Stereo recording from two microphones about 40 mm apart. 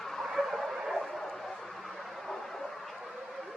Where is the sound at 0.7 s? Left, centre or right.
Centre.